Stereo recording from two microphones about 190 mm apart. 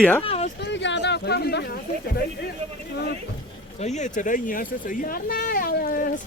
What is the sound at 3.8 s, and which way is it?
Speech, 35° left (ahead or behind).